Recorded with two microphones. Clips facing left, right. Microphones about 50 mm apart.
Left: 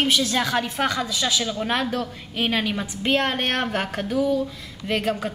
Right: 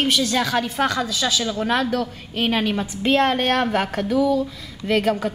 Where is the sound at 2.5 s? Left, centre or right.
Centre.